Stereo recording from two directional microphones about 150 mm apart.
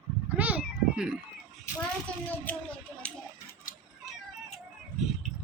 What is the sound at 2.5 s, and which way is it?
Speech, 10° left (ahead or behind).